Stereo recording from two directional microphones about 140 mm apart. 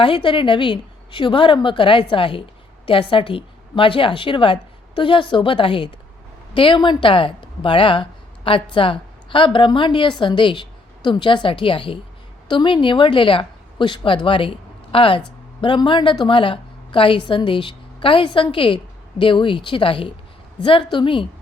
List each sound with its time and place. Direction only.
0.0 s a woman's voice: 40° left (ahead or behind)